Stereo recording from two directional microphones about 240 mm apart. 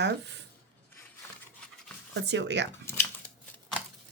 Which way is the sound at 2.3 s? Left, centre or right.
Right.